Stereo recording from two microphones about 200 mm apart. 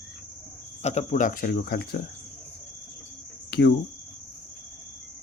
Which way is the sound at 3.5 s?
55° left (ahead or behind).